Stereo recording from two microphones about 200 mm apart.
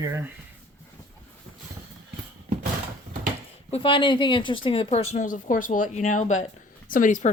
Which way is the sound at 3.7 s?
25° left (ahead or behind).